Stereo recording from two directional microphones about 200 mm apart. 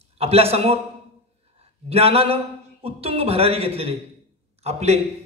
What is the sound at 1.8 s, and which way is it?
A man's voice, 30° right (ahead or behind).